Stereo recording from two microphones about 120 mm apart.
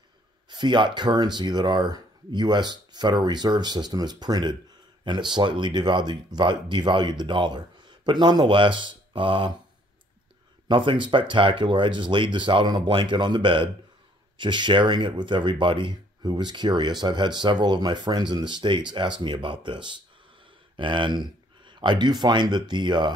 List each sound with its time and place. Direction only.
0.5 s speech: 40° right (ahead or behind)
10.7 s speech: 45° right (ahead or behind)